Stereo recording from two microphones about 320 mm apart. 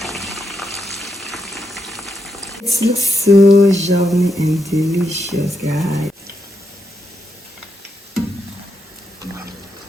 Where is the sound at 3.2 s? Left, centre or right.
Right.